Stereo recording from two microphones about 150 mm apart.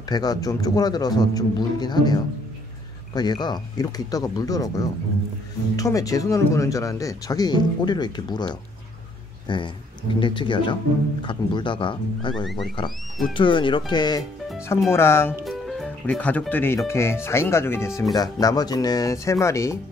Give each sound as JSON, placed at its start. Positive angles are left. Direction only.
{"t": 0.1, "sound": "speech", "side_deg": 25}
{"t": 14.9, "sound": "speech", "side_deg": 15}
{"t": 15.4, "sound": "speech", "side_deg": 0}